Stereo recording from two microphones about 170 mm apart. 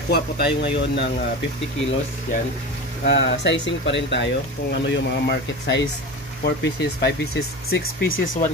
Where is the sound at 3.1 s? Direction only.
90° left.